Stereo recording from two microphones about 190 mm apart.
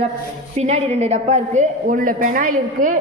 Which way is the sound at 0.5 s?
35° right (ahead or behind).